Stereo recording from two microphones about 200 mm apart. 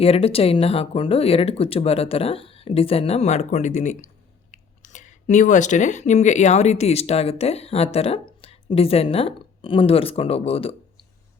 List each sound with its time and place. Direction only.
0.0 s speech: 30° left (ahead or behind)